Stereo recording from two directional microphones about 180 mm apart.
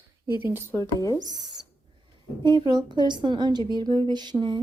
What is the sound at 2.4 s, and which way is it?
A woman's voice, 25° right (ahead or behind).